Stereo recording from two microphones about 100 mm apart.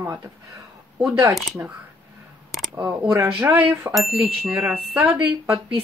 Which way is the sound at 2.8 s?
20° right (ahead or behind).